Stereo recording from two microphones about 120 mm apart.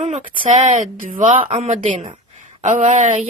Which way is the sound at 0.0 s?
75° right (ahead or behind).